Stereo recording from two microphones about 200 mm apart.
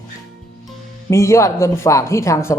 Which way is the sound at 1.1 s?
15° left (ahead or behind).